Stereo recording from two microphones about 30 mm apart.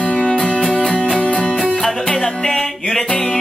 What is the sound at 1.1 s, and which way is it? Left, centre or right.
Music, left.